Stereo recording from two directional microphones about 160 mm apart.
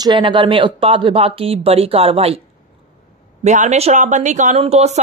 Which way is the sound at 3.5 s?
45° right (ahead or behind).